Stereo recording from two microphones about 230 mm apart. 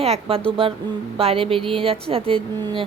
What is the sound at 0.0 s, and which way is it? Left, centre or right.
A woman's voice, right.